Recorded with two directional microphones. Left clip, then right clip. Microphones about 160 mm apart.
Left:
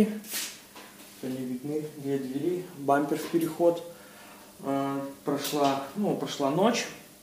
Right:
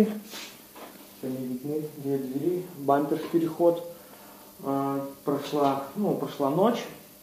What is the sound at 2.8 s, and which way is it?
Speech, 20° left (ahead or behind).